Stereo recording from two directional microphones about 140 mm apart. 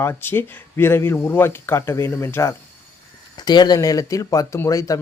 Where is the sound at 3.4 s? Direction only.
30° left (ahead or behind).